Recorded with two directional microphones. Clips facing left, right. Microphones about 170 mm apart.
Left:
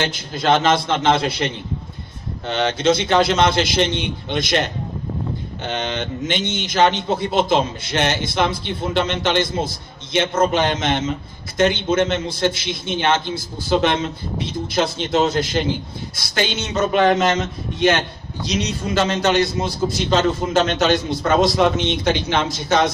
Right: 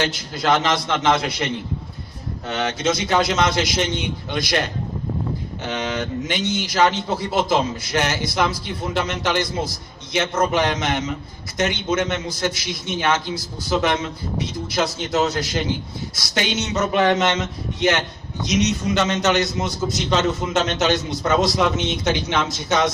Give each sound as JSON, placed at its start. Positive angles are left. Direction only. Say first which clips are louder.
{"t": 0.0, "sound": "a man's voice", "louder": "left 1 dB", "side_deg": 25}